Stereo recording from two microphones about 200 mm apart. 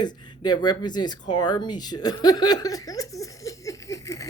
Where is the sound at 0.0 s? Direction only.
20° left (ahead or behind).